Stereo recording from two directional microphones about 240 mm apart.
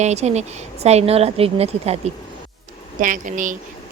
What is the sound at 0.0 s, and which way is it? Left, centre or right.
Speech, right.